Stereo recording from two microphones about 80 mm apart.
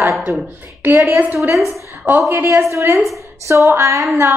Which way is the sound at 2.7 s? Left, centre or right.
Right.